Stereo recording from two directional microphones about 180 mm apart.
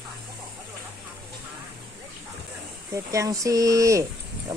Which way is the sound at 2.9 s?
15° right (ahead or behind).